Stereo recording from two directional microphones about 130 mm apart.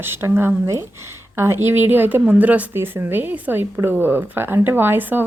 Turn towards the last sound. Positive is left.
turn(degrees=-15)  # may be behind; listen again after turning